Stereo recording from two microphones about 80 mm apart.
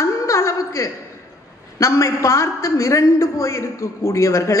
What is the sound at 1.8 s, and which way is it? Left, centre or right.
A woman's voice, left.